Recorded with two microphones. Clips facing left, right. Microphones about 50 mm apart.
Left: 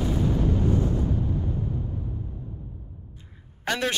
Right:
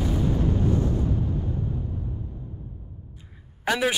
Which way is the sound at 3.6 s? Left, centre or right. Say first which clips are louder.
Right 3 dB; centre.